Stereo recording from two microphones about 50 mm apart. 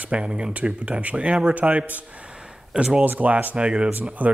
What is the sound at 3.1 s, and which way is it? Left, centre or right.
Speech, right.